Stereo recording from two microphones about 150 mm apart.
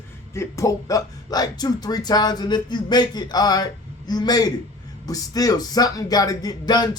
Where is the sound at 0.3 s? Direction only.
20° left (ahead or behind).